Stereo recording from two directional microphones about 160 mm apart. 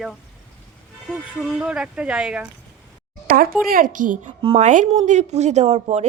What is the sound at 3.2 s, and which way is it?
A woman's voice, 65° right (ahead or behind).